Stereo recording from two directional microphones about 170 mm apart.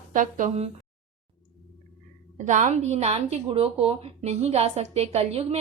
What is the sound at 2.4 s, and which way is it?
A woman's voice, 45° right (ahead or behind).